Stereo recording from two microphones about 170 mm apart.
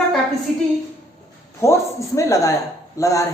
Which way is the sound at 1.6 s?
15° left (ahead or behind).